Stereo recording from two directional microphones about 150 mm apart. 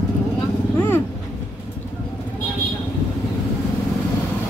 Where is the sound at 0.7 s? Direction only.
15° left (ahead or behind).